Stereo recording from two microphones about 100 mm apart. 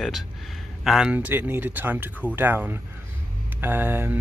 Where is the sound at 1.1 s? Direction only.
20° right (ahead or behind).